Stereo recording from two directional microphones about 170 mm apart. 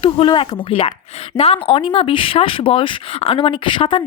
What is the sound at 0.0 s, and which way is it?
Speech, 30° left (ahead or behind).